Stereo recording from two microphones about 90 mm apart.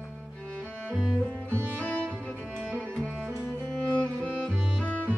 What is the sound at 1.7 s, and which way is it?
Music, 15° left (ahead or behind).